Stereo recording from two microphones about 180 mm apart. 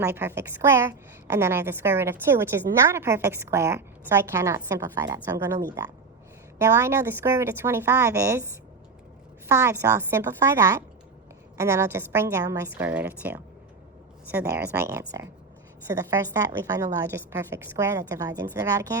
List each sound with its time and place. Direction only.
0.0 s a woman's voice: 10° right (ahead or behind)
9.5 s a woman's voice: 15° right (ahead or behind)